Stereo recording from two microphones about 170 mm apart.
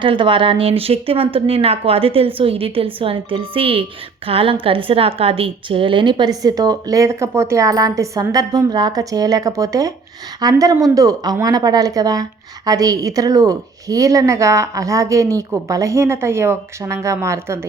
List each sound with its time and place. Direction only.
0.0 s a woman's voice: 30° right (ahead or behind)